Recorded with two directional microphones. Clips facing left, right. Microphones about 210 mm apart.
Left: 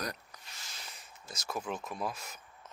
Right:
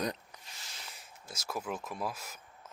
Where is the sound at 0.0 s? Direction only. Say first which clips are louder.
Right 4 dB; 20° right (ahead or behind).